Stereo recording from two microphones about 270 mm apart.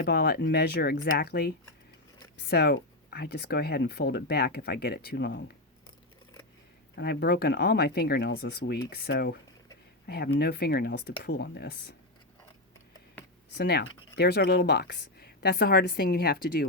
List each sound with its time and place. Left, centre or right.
0.0 s speech: left
6.9 s speech: left
13.6 s speech: left